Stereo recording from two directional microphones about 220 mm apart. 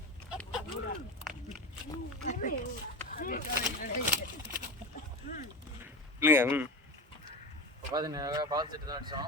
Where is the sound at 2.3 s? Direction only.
35° left (ahead or behind).